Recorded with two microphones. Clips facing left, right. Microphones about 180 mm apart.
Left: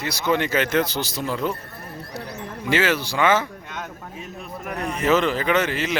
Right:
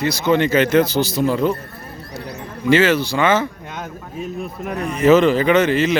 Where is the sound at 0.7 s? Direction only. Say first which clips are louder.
Right 7 dB; 5° right (ahead or behind).